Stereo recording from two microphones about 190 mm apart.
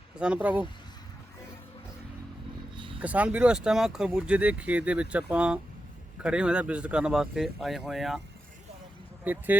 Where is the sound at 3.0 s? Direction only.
10° right (ahead or behind).